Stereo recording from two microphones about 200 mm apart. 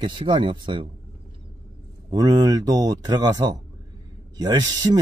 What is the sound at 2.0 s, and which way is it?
Speech, 20° right (ahead or behind).